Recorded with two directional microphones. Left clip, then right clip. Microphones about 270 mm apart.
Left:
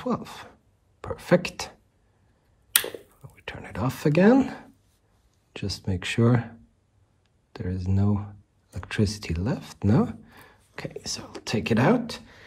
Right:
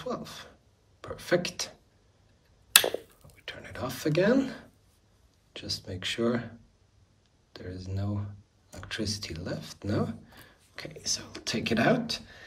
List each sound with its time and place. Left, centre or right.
0.0 s speech: left
3.3 s speech: centre
7.5 s speech: left